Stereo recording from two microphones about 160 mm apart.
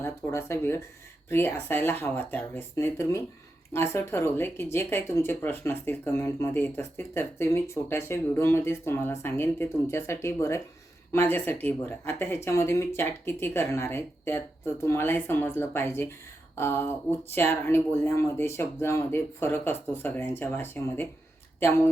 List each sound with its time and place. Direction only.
0.0 s speech: 15° left (ahead or behind)